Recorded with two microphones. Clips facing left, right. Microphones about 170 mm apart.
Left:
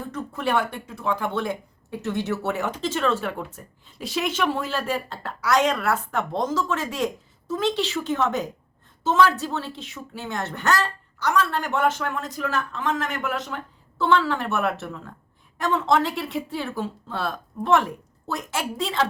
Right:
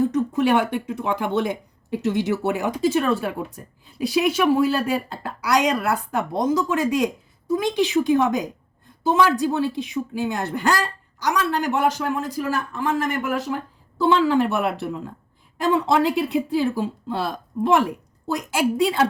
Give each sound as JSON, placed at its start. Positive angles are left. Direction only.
{"t": 0.1, "sound": "speech", "side_deg": -15}